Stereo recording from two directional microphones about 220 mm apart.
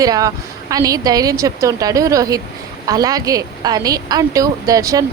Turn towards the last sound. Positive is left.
turn(degrees=-15)  # may be behind; listen again after turning